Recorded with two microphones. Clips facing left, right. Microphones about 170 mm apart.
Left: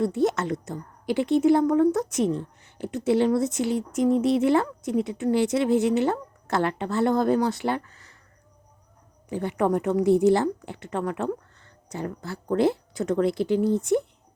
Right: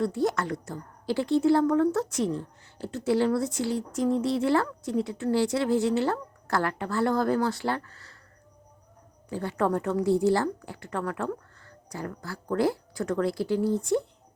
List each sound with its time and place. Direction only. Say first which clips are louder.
0.0 s a woman's voice: left 3 dB; 20° left (ahead or behind)
9.3 s a woman's voice: left 3 dB; 20° left (ahead or behind)